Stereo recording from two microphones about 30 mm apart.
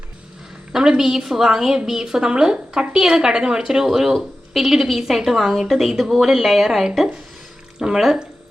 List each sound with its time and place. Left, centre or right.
0.8 s a woman's voice: right
3.8 s a woman's voice: centre
5.8 s a woman's voice: centre